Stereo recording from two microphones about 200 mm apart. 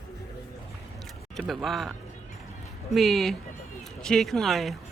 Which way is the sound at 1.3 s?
Centre (ahead or behind).